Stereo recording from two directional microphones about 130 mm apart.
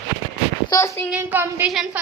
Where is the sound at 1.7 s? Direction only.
5° right (ahead or behind).